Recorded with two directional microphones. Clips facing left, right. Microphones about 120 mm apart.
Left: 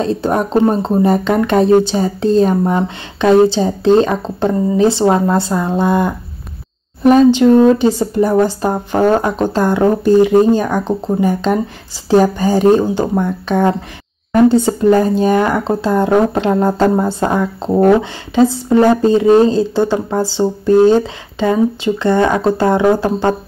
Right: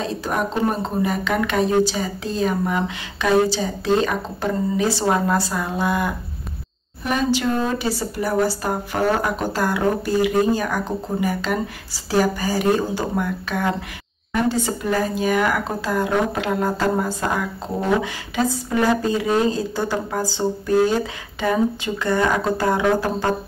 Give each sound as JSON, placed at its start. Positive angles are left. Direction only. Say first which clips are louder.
{"t": 0.0, "sound": "speech", "louder": "left 8 dB", "side_deg": 30}
{"t": 7.4, "sound": "speech", "louder": "left 13 dB", "side_deg": 25}
{"t": 14.3, "sound": "speech", "louder": "left 11 dB", "side_deg": 35}
{"t": 19.7, "sound": "speech", "louder": "left 8 dB", "side_deg": 20}